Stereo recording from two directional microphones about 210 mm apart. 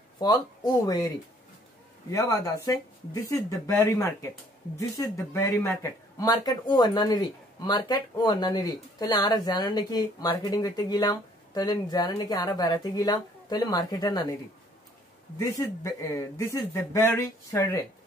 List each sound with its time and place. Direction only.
0.8 s speech: 20° left (ahead or behind)
15.3 s speech: 15° left (ahead or behind)